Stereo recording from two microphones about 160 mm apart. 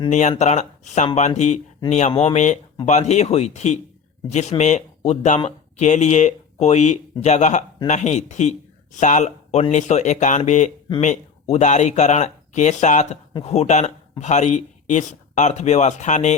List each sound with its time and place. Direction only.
0.1 s speech: 45° left (ahead or behind)